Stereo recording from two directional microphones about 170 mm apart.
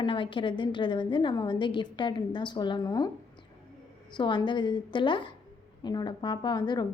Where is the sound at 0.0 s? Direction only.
30° left (ahead or behind).